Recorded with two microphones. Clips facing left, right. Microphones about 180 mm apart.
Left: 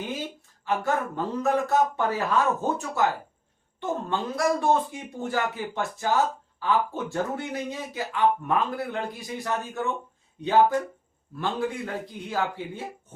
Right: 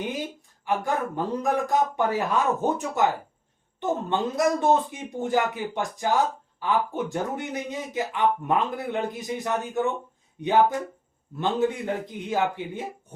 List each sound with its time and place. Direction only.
0.6 s a man's voice: 15° right (ahead or behind)
11.3 s speech: 20° right (ahead or behind)